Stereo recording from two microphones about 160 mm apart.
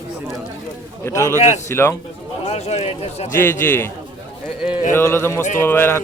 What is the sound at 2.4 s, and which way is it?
Speech, 45° left (ahead or behind).